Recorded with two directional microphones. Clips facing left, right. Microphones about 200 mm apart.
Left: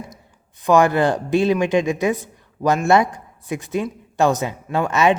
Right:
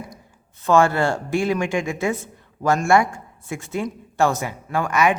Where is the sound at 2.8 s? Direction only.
20° left (ahead or behind).